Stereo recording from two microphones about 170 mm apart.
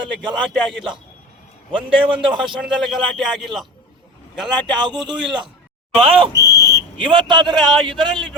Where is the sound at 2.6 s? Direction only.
Centre (ahead or behind).